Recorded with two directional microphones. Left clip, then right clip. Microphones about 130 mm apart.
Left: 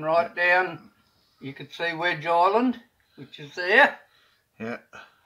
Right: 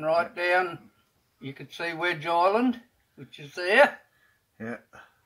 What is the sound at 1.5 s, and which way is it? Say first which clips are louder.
Speech: left 4 dB; 65° right (ahead or behind).